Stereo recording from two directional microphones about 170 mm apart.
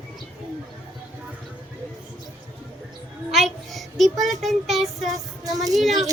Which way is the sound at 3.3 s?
Centre (ahead or behind).